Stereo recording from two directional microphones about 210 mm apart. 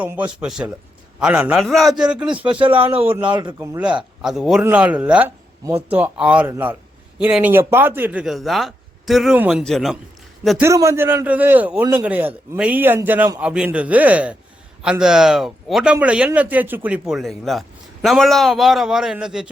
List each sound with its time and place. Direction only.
0.0 s a man's voice: 5° right (ahead or behind)
2.4 s speech: 25° right (ahead or behind)
3.0 s a man's voice: 10° right (ahead or behind)
3.2 s a man's voice: 20° right (ahead or behind); by 10.0 s centre (ahead or behind)
10.6 s a man's voice: 15° right (ahead or behind)